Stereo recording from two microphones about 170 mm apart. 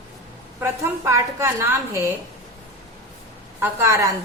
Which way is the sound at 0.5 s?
15° right (ahead or behind).